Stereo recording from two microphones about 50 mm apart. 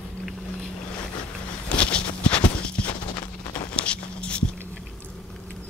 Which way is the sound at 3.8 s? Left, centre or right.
Left.